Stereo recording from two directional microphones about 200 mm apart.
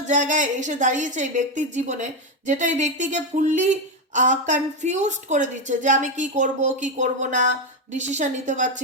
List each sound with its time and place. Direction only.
0.0 s speech: 40° right (ahead or behind)